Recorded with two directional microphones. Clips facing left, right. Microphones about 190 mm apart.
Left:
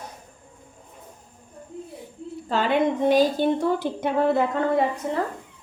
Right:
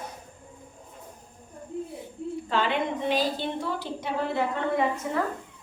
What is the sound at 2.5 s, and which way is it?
A woman's voice, 45° left (ahead or behind).